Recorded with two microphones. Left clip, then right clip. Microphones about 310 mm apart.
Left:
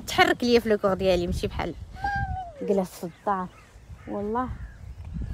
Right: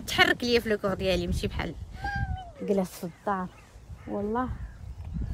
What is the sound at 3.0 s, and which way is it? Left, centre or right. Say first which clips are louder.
Speech: left 3 dB; left.